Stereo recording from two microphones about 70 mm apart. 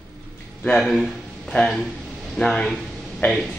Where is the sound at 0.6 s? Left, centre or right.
Centre.